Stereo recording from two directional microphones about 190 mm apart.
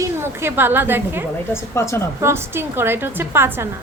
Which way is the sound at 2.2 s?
15° right (ahead or behind).